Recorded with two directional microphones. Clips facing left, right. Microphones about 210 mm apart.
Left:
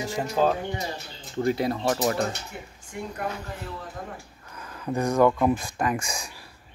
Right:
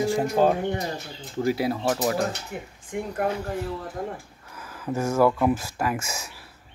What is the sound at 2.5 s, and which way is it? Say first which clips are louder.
Speech: right 5 dB; 50° right (ahead or behind).